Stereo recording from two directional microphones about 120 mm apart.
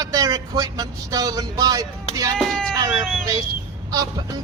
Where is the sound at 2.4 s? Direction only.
5° left (ahead or behind).